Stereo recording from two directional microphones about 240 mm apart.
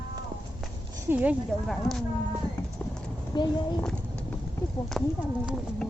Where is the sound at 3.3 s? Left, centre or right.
Centre.